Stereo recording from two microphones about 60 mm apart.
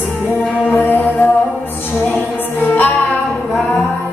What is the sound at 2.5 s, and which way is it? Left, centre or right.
Music, left.